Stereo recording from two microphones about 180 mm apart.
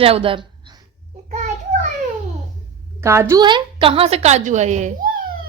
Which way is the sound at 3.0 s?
15° right (ahead or behind).